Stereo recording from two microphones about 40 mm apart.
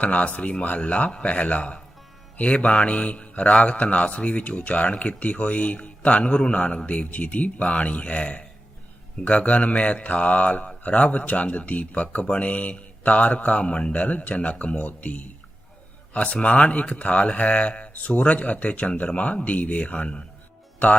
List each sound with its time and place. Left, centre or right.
0.0 s a man's voice: left